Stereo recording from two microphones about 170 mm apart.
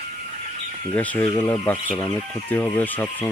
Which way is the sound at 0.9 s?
10° left (ahead or behind).